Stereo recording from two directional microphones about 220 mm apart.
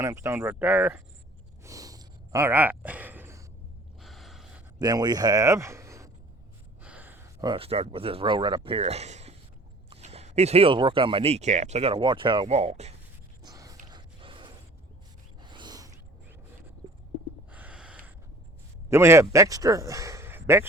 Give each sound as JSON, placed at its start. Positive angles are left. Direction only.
{"t": 0.0, "sound": "speech", "side_deg": -15}
{"t": 1.6, "sound": "sigh", "side_deg": -15}
{"t": 4.0, "sound": "gasp", "side_deg": 0}
{"t": 4.8, "sound": "speech", "side_deg": -20}
{"t": 6.8, "sound": "a sound", "side_deg": -5}
{"t": 7.4, "sound": "speech", "side_deg": -25}
{"t": 13.4, "sound": "a sound", "side_deg": -15}
{"t": 17.5, "sound": "a sound", "side_deg": -5}
{"t": 18.9, "sound": "speech", "side_deg": -10}